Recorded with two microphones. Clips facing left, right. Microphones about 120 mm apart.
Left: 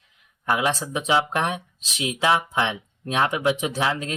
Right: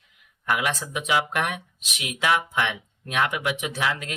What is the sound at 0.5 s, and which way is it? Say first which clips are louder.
Speech: left 3 dB; 30° left (ahead or behind).